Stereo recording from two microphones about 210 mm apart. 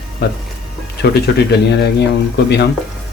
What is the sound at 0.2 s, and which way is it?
Speech, 50° left (ahead or behind).